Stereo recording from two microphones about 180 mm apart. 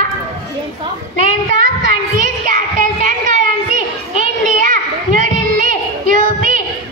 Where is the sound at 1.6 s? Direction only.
50° right (ahead or behind).